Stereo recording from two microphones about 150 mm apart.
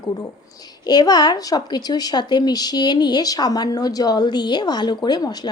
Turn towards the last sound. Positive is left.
turn(degrees=25)  # may be behind; listen again after turning